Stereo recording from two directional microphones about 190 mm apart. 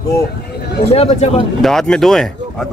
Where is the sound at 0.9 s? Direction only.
30° left (ahead or behind).